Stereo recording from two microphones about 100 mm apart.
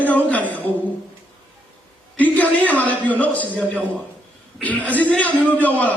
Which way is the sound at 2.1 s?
15° left (ahead or behind).